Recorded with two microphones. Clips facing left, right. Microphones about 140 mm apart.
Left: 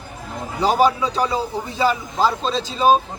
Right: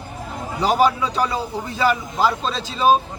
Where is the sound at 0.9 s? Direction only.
20° left (ahead or behind).